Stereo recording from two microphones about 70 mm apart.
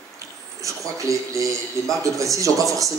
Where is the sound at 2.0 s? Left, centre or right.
Right.